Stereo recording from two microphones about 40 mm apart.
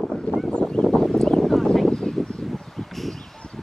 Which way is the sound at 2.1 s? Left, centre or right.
Centre.